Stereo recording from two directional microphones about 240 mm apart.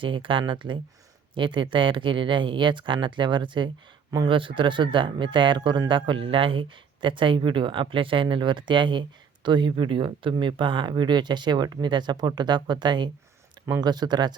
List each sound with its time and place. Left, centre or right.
0.0 s speech: right